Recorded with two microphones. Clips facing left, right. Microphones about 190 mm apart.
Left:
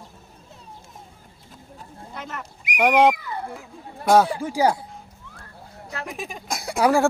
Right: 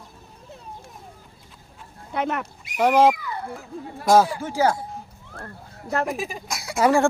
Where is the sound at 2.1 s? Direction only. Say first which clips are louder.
Right 10 dB; 60° right (ahead or behind).